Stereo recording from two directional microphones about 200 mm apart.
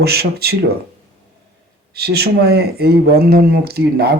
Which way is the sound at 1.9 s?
50° right (ahead or behind).